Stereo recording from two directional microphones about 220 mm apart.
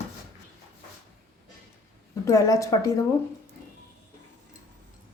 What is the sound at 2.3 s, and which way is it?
Speech, 15° left (ahead or behind).